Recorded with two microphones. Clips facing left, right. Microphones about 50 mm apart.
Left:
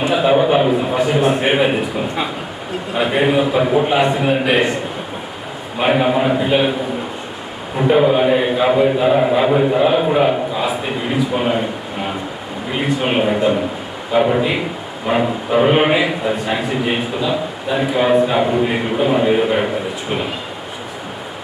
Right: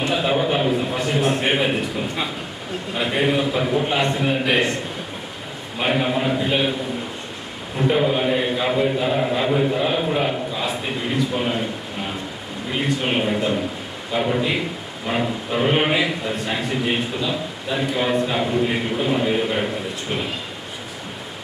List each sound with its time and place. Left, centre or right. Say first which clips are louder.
0.0 s a man's voice: left 6 dB; centre
5.8 s a man's voice: left 6 dB; centre
7.8 s a man's voice: left 6 dB; centre
11.3 s a sound: left 5 dB; centre
12.7 s a man's voice: left 4 dB; centre